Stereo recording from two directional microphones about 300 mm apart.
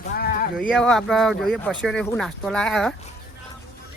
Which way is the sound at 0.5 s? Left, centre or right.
Centre.